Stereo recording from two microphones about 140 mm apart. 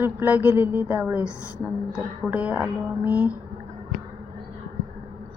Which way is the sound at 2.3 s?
10° right (ahead or behind).